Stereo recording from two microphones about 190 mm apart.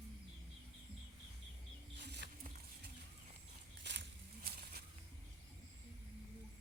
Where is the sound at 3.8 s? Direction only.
65° right (ahead or behind).